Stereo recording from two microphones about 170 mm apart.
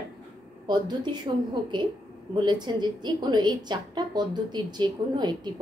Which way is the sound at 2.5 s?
25° right (ahead or behind).